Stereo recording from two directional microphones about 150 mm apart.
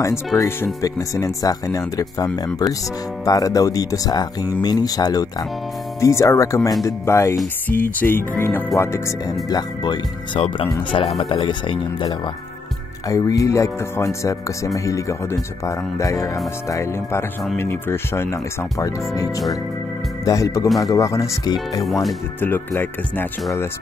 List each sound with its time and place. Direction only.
0.3 s speech: 15° left (ahead or behind)
3.3 s speech: 25° left (ahead or behind)
13.1 s speech: 20° left (ahead or behind)